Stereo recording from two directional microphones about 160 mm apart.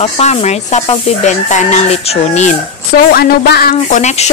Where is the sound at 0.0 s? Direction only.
40° left (ahead or behind).